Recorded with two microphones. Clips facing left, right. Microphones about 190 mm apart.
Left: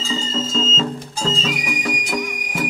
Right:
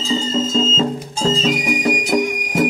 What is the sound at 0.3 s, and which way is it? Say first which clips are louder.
Music: right 4 dB; 40° right (ahead or behind).